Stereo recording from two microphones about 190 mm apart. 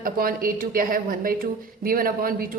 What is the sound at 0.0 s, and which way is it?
A woman's voice, 50° right (ahead or behind).